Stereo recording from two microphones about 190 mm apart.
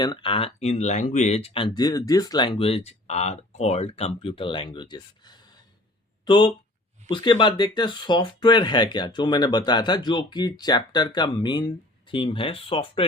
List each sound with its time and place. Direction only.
0.0 s speech: 25° left (ahead or behind)